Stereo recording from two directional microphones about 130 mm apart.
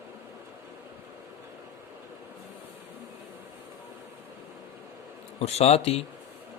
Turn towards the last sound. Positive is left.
turn(degrees=50)  # may be behind; listen again after turning